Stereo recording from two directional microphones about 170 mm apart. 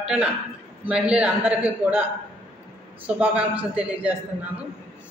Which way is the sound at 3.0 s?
10° right (ahead or behind).